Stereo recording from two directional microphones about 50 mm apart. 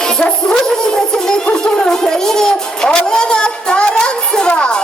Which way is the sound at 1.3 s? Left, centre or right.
Centre.